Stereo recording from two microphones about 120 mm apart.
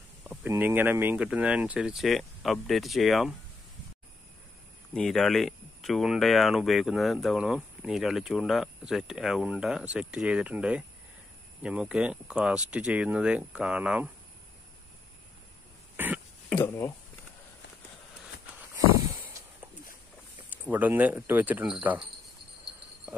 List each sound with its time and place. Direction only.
0.5 s speech: 15° right (ahead or behind); by 3.3 s centre (ahead or behind)
4.9 s speech: 5° left (ahead or behind)
16.6 s speech: 25° left (ahead or behind)
20.6 s speech: 15° right (ahead or behind)